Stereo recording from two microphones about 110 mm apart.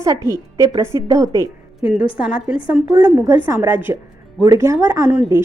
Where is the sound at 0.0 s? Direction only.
30° right (ahead or behind).